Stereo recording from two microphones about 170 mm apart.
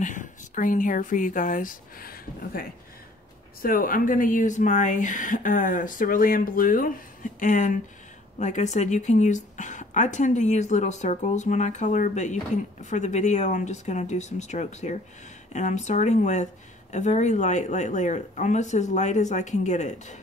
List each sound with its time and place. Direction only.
0.0 s speech: 50° left (ahead or behind)